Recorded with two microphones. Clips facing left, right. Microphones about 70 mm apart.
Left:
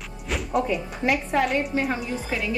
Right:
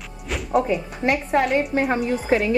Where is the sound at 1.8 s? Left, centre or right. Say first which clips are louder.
Right 6 dB; right.